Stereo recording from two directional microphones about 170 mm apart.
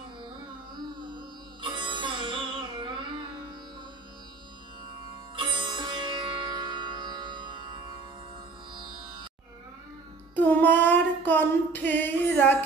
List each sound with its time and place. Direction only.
1.6 s sitar: 30° right (ahead or behind)
5.3 s sitar: 30° right (ahead or behind)
8.7 s music: 30° right (ahead or behind)
10.3 s child singing: 10° left (ahead or behind)